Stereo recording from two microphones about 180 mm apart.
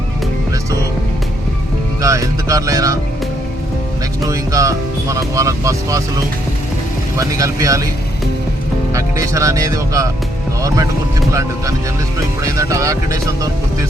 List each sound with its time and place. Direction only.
2.0 s speech: 15° right (ahead or behind)
4.3 s speech: 20° right (ahead or behind)
7.2 s speech: 20° right (ahead or behind)
8.9 s speech: 15° right (ahead or behind)
11.3 s speech: 20° right (ahead or behind)